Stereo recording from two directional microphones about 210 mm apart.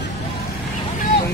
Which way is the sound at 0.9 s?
45° left (ahead or behind).